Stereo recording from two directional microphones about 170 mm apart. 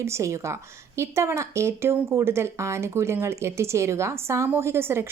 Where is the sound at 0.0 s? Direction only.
15° right (ahead or behind).